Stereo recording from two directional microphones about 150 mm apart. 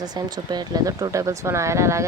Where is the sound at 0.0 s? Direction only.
25° right (ahead or behind).